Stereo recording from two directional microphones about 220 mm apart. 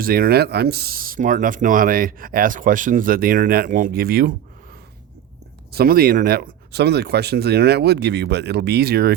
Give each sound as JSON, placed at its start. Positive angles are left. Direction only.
{"t": 0.0, "sound": "speech", "side_deg": -40}
{"t": 5.7, "sound": "speech", "side_deg": -45}